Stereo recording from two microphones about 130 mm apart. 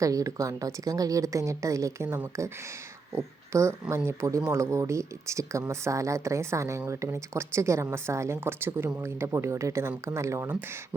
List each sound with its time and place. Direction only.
0.0 s speech: 25° right (ahead or behind)